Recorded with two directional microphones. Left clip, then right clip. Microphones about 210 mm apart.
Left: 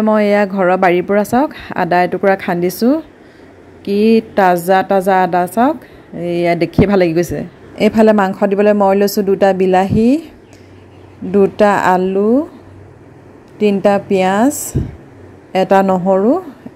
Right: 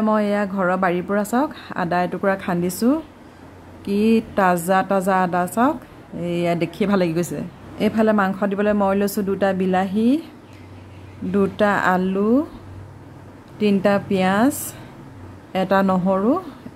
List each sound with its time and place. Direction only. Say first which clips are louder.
0.0 s a woman's voice: left 8 dB; 15° left (ahead or behind)
7.7 s a woman's voice: left 8 dB; 25° left (ahead or behind)
11.3 s a woman's voice: left 8 dB; 15° left (ahead or behind)
13.6 s a woman's voice: left 6 dB; 15° left (ahead or behind)